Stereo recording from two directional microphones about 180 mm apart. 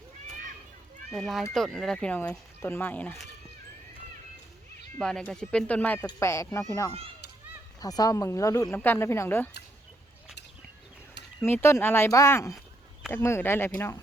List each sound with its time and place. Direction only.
1.1 s speech: centre (ahead or behind)
4.9 s speech: 5° left (ahead or behind)
7.8 s speech: 20° left (ahead or behind)
11.4 s speech: 15° left (ahead or behind)